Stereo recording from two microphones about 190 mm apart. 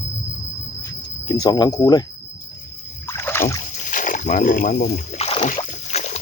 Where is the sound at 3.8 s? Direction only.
45° left (ahead or behind).